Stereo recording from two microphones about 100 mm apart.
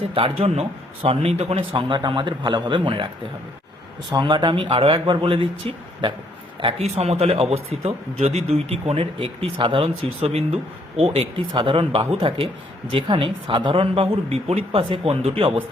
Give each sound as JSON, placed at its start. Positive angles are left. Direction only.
{"t": 0.1, "sound": "speech", "side_deg": -75}
{"t": 1.7, "sound": "speech", "side_deg": -50}
{"t": 4.1, "sound": "speech", "side_deg": -50}
{"t": 6.6, "sound": "speech", "side_deg": -80}